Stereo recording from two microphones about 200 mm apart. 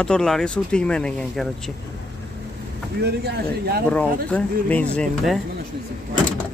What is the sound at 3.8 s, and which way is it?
Speech, 5° left (ahead or behind).